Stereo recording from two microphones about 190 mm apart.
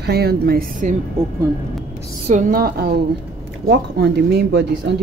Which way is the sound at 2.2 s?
45° right (ahead or behind).